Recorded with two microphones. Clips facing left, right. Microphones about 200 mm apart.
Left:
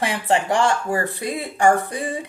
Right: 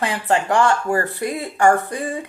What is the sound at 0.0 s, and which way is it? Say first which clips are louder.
A woman's voice: even; 20° left (ahead or behind).